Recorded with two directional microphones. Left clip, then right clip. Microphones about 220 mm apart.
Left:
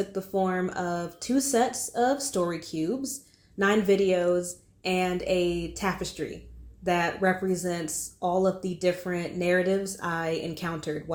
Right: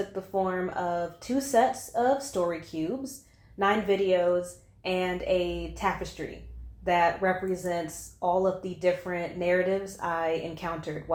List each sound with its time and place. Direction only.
0.1 s speech: 55° left (ahead or behind)
3.6 s speech: 50° left (ahead or behind)